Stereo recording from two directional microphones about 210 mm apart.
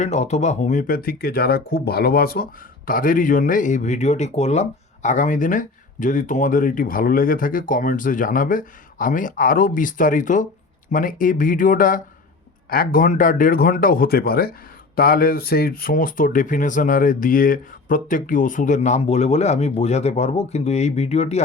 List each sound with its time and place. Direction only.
0.0 s speech: 30° left (ahead or behind)